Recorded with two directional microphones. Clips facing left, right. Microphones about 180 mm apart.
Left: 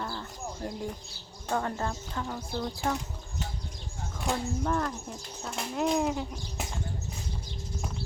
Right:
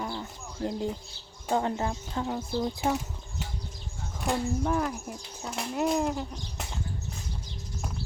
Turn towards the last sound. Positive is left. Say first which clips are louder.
# even
turn(degrees=0)  # may be behind; listen again after turning